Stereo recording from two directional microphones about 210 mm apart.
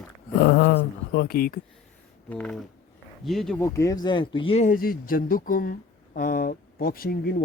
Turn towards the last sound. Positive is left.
turn(degrees=45)  # may be behind; listen again after turning